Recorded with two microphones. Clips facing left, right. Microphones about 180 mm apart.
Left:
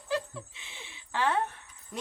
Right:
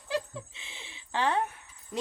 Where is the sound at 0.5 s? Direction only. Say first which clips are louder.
Even; 25° right (ahead or behind).